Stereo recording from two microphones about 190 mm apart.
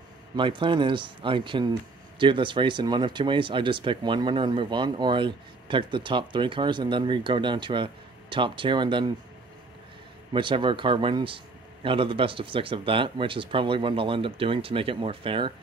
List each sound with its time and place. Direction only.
0.4 s speech: 25° right (ahead or behind)
10.3 s speech: 25° right (ahead or behind)